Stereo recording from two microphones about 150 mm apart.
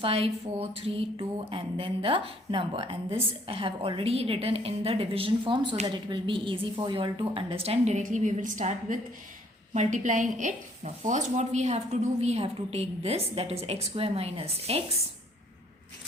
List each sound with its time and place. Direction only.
0.0 s speech: 40° right (ahead or behind)